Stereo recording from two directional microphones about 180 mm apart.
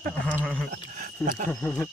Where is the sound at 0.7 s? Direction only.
45° right (ahead or behind).